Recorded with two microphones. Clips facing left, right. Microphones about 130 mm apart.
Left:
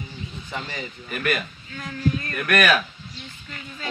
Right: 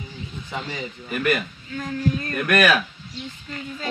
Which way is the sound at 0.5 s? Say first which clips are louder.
Right 2 dB; 15° right (ahead or behind).